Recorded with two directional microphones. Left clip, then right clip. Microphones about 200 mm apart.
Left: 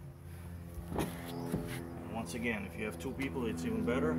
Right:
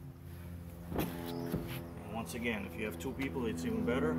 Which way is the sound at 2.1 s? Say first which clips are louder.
Even; centre (ahead or behind).